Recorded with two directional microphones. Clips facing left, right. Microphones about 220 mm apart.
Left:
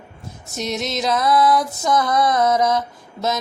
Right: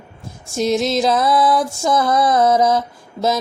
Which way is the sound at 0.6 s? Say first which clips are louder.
Right 7 dB; 30° right (ahead or behind).